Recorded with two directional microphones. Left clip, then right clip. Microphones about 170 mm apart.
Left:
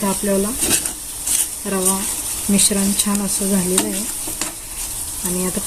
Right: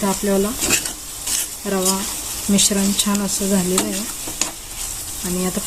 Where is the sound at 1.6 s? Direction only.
Centre (ahead or behind).